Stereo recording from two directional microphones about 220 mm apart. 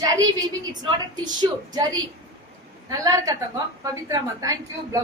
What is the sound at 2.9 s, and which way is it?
A woman's voice, 15° right (ahead or behind).